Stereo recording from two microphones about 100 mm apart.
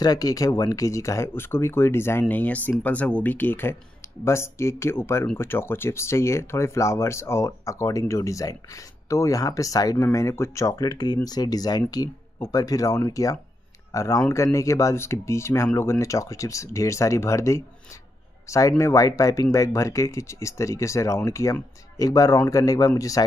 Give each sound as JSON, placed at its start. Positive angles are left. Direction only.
{"t": 0.0, "sound": "speech", "side_deg": 40}